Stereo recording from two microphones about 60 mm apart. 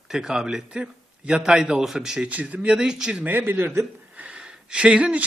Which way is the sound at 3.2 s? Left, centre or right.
Right.